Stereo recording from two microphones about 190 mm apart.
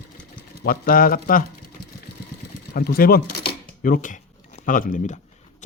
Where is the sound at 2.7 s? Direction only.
55° left (ahead or behind).